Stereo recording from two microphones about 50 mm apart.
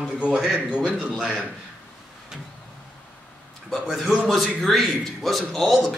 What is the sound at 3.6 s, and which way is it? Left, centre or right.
A man's voice, centre.